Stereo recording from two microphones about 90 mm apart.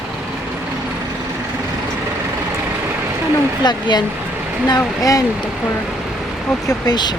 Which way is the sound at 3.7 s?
55° left (ahead or behind).